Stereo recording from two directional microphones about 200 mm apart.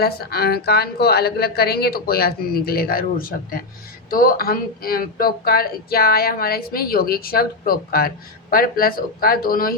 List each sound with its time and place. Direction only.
0.0 s speech: 50° left (ahead or behind)